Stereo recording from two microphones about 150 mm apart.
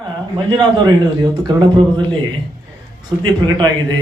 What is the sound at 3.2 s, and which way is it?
Speech, 30° right (ahead or behind).